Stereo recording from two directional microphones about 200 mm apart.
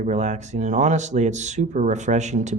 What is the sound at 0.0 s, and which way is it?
Speech, 35° right (ahead or behind).